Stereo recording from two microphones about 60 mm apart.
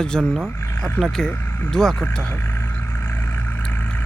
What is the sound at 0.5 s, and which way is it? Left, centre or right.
Speech, left.